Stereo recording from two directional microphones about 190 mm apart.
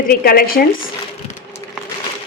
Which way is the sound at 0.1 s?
50° left (ahead or behind).